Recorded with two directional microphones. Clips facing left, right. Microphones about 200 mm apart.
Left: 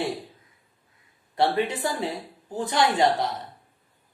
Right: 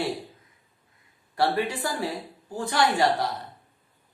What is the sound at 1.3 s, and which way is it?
A woman's voice, 20° left (ahead or behind).